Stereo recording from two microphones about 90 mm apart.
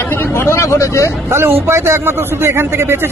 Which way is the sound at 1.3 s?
25° right (ahead or behind).